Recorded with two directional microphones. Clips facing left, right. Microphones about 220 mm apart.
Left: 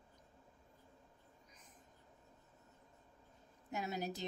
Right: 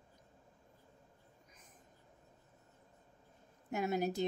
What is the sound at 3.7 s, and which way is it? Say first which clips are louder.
Speech: right 7 dB; 55° right (ahead or behind).